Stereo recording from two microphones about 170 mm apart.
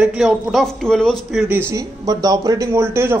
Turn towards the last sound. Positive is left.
turn(degrees=-15)  # may be behind; listen again after turning